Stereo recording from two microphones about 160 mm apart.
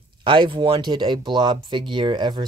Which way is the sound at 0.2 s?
30° right (ahead or behind).